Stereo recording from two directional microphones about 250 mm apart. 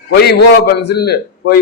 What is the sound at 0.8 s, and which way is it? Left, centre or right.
Speech, left.